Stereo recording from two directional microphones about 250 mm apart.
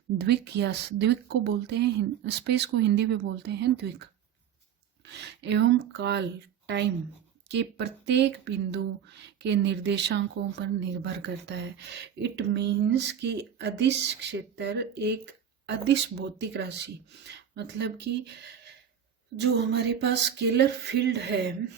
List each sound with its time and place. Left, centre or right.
0.2 s speech: right
5.0 s speech: right
19.4 s speech: right